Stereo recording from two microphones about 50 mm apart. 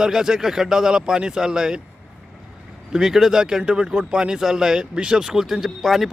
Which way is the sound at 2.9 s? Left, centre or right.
Centre.